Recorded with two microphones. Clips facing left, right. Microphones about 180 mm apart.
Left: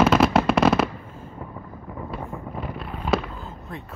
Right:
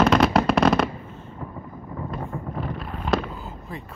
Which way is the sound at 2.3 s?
Centre (ahead or behind).